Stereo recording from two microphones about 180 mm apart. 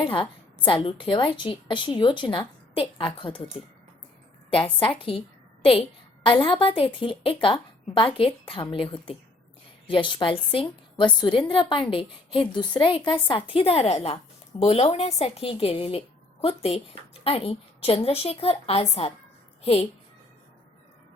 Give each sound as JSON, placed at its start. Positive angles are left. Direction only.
{"t": 0.0, "sound": "a woman's voice", "side_deg": 30}
{"t": 4.9, "sound": "a woman's voice", "side_deg": 30}
{"t": 6.2, "sound": "a woman's voice", "side_deg": 25}